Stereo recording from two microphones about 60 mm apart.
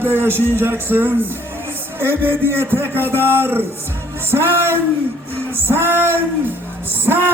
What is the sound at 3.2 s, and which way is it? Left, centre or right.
Speech, left.